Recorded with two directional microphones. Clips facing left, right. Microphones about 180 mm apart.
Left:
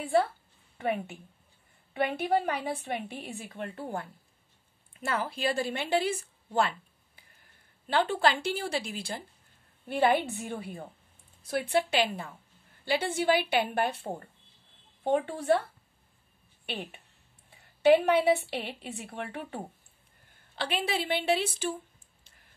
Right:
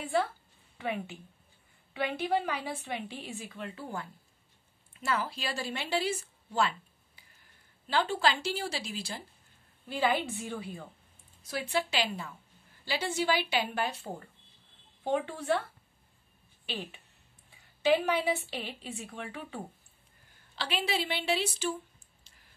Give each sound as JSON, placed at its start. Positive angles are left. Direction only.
{"t": 0.7, "sound": "a woman's voice", "side_deg": 50}
{"t": 7.8, "sound": "speech", "side_deg": 55}
{"t": 15.0, "sound": "a woman's voice", "side_deg": 45}
{"t": 16.6, "sound": "a woman's voice", "side_deg": 60}